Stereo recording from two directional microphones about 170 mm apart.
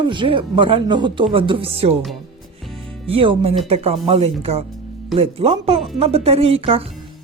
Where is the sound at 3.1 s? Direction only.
35° right (ahead or behind).